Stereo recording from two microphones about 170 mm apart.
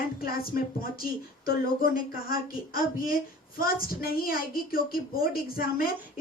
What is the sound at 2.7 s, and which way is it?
A woman's voice, 55° left (ahead or behind).